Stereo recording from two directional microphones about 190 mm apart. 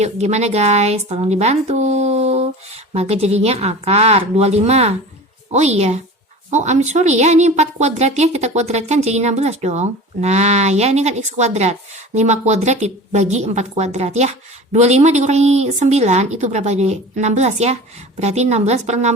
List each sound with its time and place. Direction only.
0.0 s a woman's voice: 35° right (ahead or behind)